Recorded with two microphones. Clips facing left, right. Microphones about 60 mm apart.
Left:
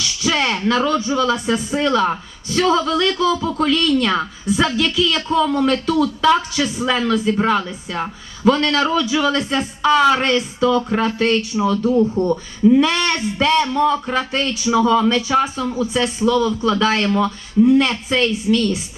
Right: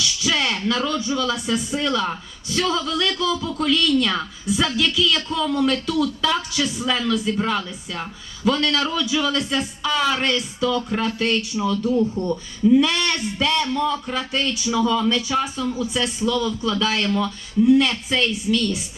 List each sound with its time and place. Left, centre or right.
0.0 s a man's voice: left